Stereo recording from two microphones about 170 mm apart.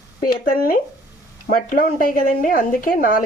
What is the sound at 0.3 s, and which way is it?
A woman's voice, 60° left (ahead or behind).